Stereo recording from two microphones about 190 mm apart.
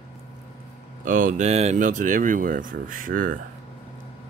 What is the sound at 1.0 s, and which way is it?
Speech, 45° right (ahead or behind).